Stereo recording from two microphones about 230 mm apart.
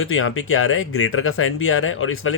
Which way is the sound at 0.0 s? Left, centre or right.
Left.